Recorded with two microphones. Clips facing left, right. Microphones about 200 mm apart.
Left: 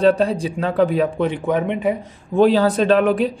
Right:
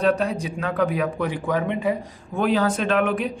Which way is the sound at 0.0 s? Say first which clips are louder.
Left 5 dB; 30° left (ahead or behind).